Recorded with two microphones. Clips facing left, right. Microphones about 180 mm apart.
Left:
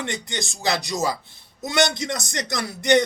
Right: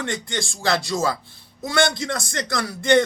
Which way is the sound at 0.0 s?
20° left (ahead or behind).